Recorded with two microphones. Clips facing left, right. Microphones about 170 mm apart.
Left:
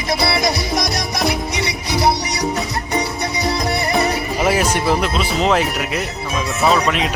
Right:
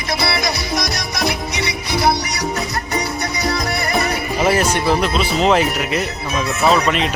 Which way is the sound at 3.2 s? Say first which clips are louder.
Left 1 dB; 30° left (ahead or behind).